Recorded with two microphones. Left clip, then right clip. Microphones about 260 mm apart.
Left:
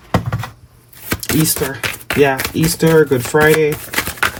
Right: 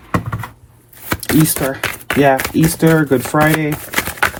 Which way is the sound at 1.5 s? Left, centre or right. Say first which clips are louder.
Right 1 dB; centre.